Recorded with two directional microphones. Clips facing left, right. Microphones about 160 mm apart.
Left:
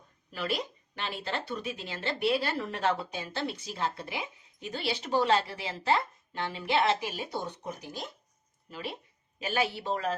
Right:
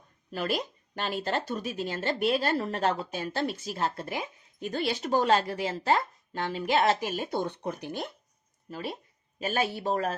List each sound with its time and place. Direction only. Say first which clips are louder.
0.3 s speech: right 3 dB; 45° right (ahead or behind); by 8.1 s 60° right (ahead or behind)
8.7 s speech: right 3 dB; 40° right (ahead or behind)